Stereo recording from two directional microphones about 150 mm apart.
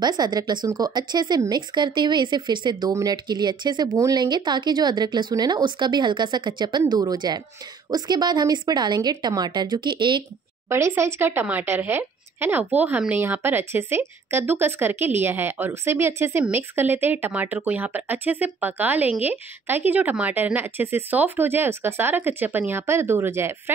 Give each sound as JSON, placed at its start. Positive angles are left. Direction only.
{"t": 0.0, "sound": "speech", "side_deg": -25}
{"t": 10.7, "sound": "speech", "side_deg": -20}